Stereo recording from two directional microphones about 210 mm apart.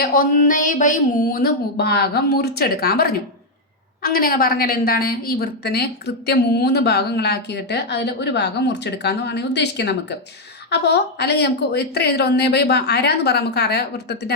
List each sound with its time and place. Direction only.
0.0 s a woman's voice: 45° left (ahead or behind)